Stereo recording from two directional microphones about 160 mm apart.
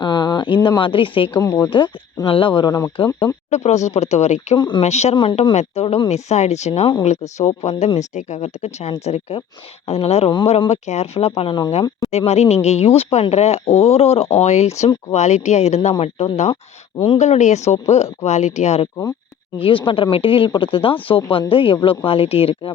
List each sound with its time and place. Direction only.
0.0 s speech: 30° left (ahead or behind)
1.4 s speech: 20° left (ahead or behind)
1.7 s speech: 30° left (ahead or behind)
3.5 s speech: 45° left (ahead or behind)
4.5 s speech: 30° left (ahead or behind)
4.8 s speech: 40° left (ahead or behind)
5.1 s speech: 30° left (ahead or behind)
5.4 s speech: 40° left (ahead or behind)
19.5 s speech: 35° left (ahead or behind)